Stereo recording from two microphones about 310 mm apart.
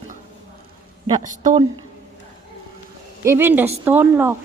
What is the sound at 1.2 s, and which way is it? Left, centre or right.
Speech, right.